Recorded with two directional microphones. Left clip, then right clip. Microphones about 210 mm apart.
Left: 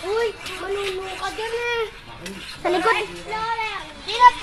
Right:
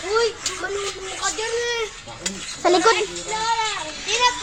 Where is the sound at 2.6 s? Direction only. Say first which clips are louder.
Right 3 dB; 10° right (ahead or behind).